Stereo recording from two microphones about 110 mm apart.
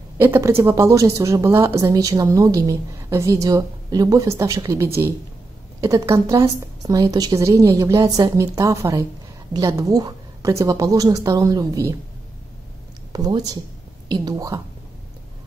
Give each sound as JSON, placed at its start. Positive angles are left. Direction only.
{"t": 0.2, "sound": "a woman's voice", "side_deg": -20}
{"t": 13.1, "sound": "a woman's voice", "side_deg": -35}